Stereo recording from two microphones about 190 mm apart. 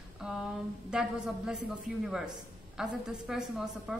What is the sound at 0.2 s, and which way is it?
A woman's voice, 5° right (ahead or behind).